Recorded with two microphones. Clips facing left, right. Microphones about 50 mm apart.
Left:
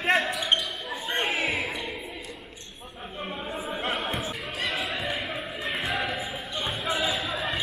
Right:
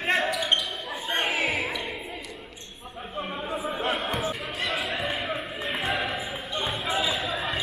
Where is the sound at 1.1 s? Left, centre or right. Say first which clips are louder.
Right 1 dB; right.